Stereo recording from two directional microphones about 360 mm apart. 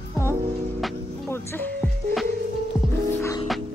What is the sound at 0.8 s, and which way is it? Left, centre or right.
Music, centre.